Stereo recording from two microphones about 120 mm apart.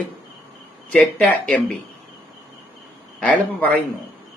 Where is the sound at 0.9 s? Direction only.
10° left (ahead or behind).